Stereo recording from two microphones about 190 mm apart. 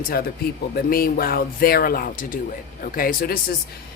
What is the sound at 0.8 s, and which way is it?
Speech, 50° left (ahead or behind).